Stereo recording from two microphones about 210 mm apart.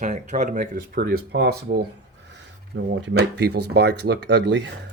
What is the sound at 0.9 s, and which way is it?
Speech, 55° right (ahead or behind).